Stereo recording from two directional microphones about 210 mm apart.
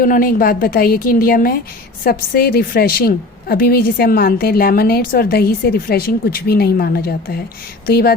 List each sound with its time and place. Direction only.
0.0 s a woman's voice: 40° left (ahead or behind)